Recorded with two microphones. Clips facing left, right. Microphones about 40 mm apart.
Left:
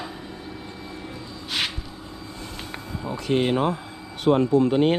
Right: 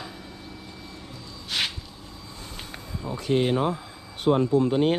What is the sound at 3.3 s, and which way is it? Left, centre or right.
Speech, left.